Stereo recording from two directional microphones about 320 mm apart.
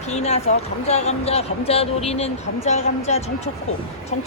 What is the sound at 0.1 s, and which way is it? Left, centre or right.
Speech, centre.